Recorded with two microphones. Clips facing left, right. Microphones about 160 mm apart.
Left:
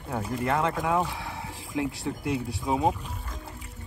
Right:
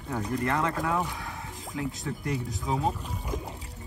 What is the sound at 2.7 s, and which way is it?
Speech, 20° left (ahead or behind).